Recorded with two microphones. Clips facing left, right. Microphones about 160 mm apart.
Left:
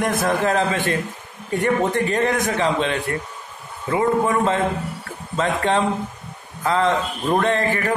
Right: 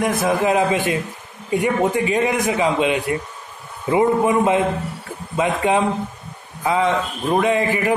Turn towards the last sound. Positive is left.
turn(degrees=-10)  # may be behind; listen again after turning